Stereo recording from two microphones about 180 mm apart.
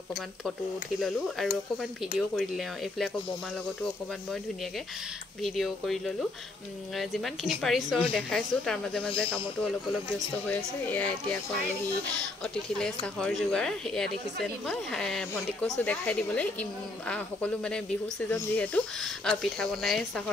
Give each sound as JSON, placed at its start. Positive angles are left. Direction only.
{"t": 0.9, "sound": "a woman's voice", "side_deg": 0}
{"t": 5.4, "sound": "a woman's voice", "side_deg": 0}
{"t": 12.7, "sound": "a woman's voice", "side_deg": 5}